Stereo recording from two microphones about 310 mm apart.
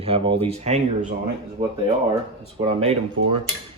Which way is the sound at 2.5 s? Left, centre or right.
Centre.